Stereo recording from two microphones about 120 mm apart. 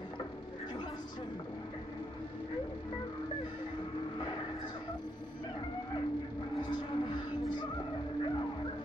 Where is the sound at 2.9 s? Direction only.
45° left (ahead or behind).